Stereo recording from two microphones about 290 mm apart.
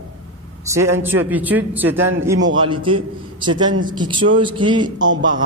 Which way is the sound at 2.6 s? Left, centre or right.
Centre.